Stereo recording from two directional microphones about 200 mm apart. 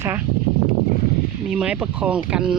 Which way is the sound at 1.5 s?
5° right (ahead or behind).